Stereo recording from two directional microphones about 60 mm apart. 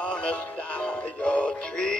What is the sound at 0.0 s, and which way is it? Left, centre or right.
Music, centre.